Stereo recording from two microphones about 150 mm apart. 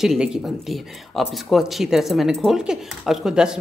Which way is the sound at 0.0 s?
5° right (ahead or behind).